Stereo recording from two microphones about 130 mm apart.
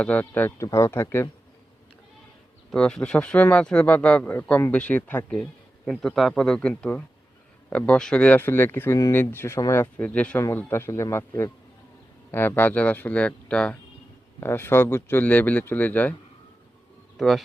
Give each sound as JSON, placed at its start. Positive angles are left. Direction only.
{"t": 0.0, "sound": "speech", "side_deg": 10}
{"t": 2.7, "sound": "speech", "side_deg": 5}
{"t": 17.2, "sound": "speech", "side_deg": 0}